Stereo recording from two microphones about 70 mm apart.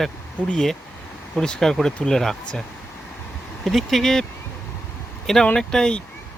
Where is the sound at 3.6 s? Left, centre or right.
Centre.